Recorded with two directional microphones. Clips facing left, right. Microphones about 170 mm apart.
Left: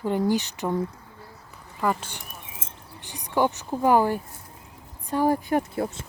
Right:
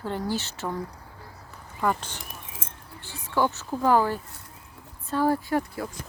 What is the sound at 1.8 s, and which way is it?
Speech, centre (ahead or behind).